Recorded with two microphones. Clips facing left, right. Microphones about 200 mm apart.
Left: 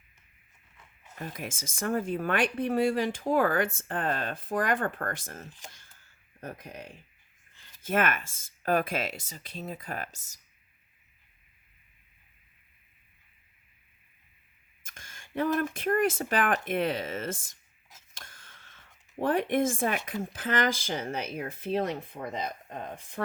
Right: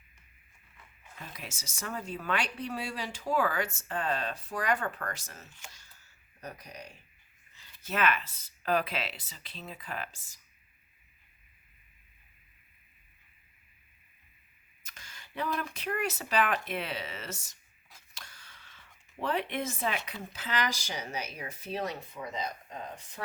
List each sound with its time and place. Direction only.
1.2 s speech: 50° left (ahead or behind)
5.7 s a sound: 50° left (ahead or behind)
7.5 s speech: 50° left (ahead or behind)
14.8 s speech: 50° left (ahead or behind)
18.1 s a sound: 50° left (ahead or behind)
20.1 s speech: 50° left (ahead or behind)